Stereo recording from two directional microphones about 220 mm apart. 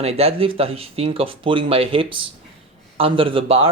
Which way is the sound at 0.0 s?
30° right (ahead or behind).